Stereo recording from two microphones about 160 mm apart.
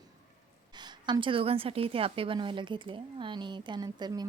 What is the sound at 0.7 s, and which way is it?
A woman's voice, 25° right (ahead or behind).